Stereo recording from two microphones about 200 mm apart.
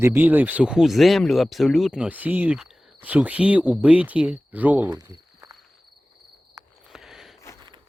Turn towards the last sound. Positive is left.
turn(degrees=0)  # may be behind; listen again after turning